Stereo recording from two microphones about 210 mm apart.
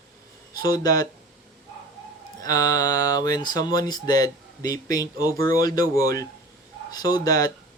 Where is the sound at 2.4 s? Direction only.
15° left (ahead or behind).